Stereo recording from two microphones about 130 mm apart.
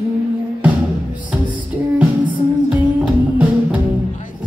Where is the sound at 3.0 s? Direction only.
10° right (ahead or behind).